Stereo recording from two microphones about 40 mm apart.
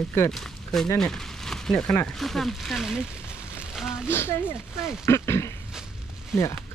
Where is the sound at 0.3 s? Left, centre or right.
Centre.